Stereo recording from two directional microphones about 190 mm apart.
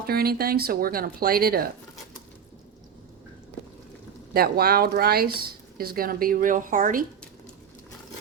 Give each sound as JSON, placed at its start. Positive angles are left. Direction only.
{"t": 0.1, "sound": "a woman's voice", "side_deg": -55}
{"t": 4.4, "sound": "a woman's voice", "side_deg": -50}